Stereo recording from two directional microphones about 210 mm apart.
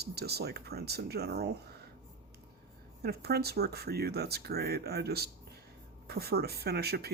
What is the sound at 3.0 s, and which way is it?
Speech, 50° right (ahead or behind).